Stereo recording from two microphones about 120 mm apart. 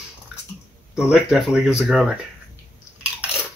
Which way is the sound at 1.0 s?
5° right (ahead or behind).